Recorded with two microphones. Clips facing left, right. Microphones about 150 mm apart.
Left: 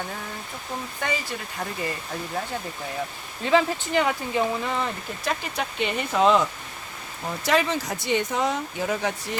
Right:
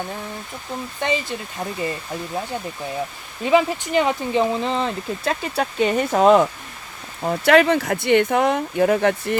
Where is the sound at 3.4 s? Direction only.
15° right (ahead or behind); by 6.4 s 45° right (ahead or behind).